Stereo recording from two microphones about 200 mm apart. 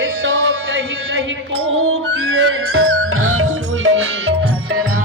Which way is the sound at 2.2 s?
85° right.